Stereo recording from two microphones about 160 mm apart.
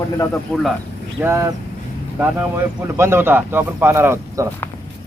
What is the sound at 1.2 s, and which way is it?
Speech, 15° right (ahead or behind).